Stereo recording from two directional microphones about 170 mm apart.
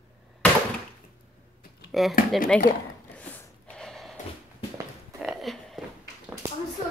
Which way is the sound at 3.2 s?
5° left (ahead or behind).